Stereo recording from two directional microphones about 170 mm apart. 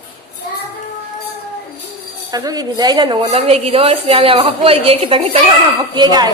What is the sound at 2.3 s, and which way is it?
A woman's voice, 20° right (ahead or behind).